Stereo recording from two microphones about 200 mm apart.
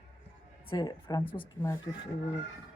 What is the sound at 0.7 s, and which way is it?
Speech, 20° left (ahead or behind).